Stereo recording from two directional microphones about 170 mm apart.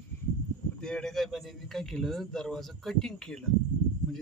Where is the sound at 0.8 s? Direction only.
5° left (ahead or behind).